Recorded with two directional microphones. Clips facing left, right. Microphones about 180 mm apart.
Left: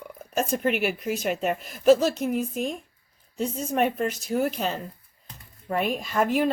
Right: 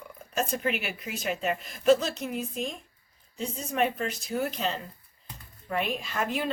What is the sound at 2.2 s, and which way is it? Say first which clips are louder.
Speech: left 6 dB; 50° left (ahead or behind).